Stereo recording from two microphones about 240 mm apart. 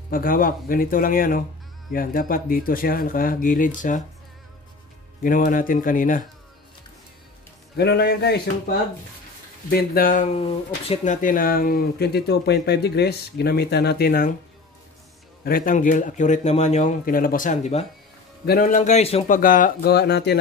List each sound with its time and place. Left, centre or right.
0.1 s speech: left
5.2 s speech: left
7.7 s a man's voice: left
9.7 s speech: left
15.4 s speech: left